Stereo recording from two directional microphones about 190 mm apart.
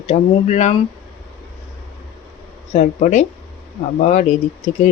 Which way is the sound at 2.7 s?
40° left (ahead or behind).